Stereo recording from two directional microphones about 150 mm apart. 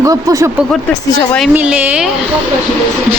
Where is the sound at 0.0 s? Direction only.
20° right (ahead or behind).